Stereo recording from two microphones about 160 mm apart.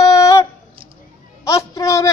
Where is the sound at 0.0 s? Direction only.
20° left (ahead or behind).